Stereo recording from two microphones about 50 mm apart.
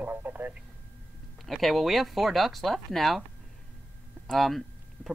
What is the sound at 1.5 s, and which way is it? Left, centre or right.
Speech, centre.